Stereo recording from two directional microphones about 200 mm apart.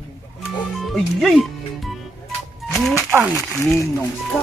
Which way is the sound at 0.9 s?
Centre (ahead or behind).